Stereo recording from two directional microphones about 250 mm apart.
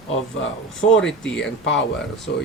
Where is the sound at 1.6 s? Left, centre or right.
Left.